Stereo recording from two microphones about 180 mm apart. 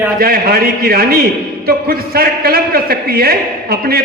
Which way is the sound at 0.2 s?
55° right (ahead or behind).